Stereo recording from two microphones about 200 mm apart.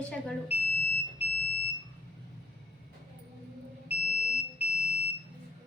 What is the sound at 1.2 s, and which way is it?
Smoke detector, 30° left (ahead or behind).